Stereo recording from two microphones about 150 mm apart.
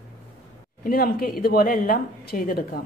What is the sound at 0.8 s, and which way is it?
A woman's voice, 80° left.